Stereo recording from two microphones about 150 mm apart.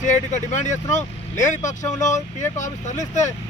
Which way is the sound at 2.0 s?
55° left (ahead or behind).